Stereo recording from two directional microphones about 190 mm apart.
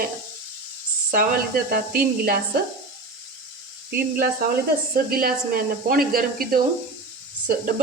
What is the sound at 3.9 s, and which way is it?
Speech, 50° right (ahead or behind).